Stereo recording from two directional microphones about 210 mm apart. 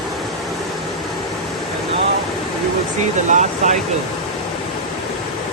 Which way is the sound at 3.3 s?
35° right (ahead or behind).